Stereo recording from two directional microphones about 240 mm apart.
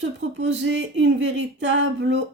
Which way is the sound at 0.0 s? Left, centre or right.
Right.